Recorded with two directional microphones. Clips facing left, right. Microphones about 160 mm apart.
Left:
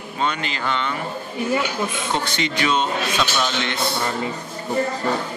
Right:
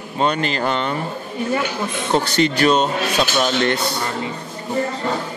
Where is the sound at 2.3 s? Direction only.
40° right (ahead or behind).